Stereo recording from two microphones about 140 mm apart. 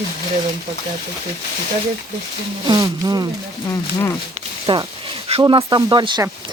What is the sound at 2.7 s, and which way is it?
Speech, 30° right (ahead or behind).